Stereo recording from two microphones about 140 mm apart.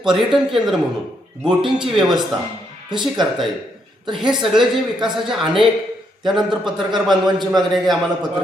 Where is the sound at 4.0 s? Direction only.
35° right (ahead or behind).